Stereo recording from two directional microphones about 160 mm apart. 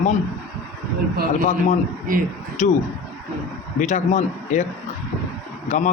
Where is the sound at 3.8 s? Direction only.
45° left (ahead or behind).